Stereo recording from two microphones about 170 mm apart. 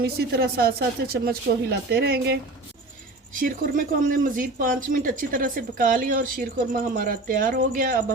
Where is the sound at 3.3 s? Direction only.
50° right (ahead or behind).